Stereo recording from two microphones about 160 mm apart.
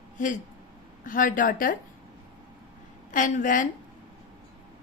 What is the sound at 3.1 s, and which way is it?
Speech, 50° left (ahead or behind).